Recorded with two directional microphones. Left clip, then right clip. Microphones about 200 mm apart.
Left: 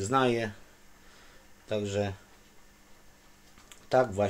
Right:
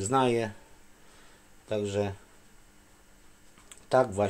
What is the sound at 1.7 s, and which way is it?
Speech, 15° right (ahead or behind).